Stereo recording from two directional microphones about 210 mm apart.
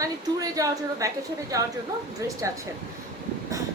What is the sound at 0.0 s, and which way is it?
A woman's voice, 15° right (ahead or behind).